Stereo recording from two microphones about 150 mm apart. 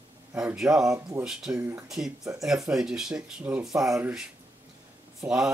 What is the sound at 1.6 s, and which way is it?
Speech, 20° right (ahead or behind).